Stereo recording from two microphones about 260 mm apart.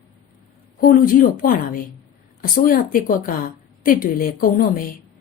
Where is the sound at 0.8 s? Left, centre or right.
Left.